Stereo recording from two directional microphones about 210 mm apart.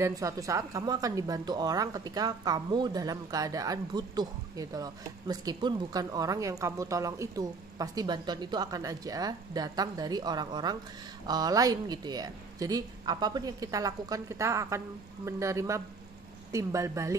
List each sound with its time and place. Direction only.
0.0 s a woman's voice: 15° right (ahead or behind)